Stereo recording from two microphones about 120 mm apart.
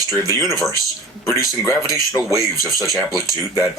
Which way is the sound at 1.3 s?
25° left (ahead or behind).